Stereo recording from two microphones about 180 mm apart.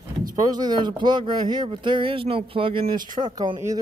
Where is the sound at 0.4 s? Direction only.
20° right (ahead or behind).